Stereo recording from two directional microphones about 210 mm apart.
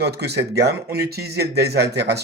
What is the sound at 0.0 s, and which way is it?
Speech, 50° right (ahead or behind).